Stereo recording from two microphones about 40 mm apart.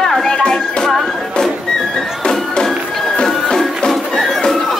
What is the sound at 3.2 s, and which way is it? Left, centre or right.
Music, centre.